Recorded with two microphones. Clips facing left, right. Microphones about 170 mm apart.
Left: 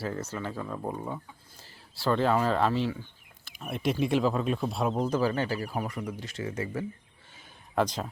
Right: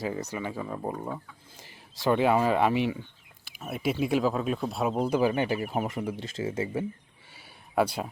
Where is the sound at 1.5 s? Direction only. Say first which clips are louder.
Right 2 dB; 15° right (ahead or behind).